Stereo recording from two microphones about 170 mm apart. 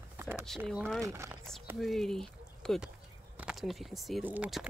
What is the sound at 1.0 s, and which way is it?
Speech, 15° right (ahead or behind).